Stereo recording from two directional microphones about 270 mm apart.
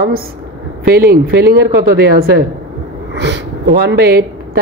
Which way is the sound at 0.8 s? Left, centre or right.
Right.